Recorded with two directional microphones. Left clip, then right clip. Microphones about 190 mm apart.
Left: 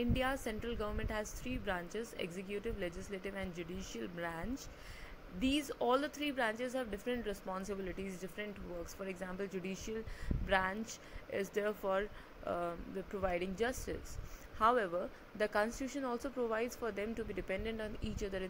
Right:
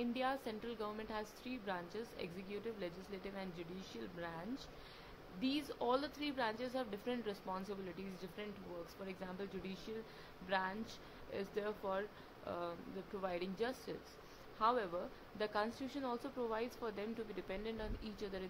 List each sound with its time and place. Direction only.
0.2 s speech: 15° left (ahead or behind)
5.6 s speech: 15° left (ahead or behind)